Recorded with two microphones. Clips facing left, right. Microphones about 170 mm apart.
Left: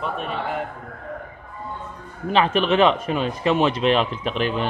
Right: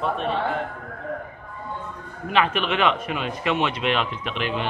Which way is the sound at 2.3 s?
35° left (ahead or behind).